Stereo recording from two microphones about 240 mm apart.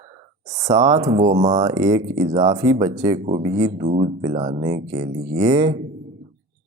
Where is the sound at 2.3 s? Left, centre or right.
Right.